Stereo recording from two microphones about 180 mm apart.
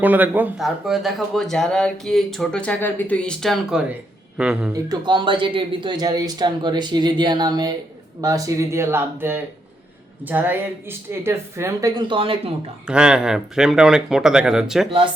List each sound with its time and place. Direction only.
0.0 s speech: 10° right (ahead or behind)
4.7 s speech: 25° right (ahead or behind)
12.9 s speech: 5° right (ahead or behind)